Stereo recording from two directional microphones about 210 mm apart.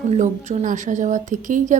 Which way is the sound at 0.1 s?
35° right (ahead or behind).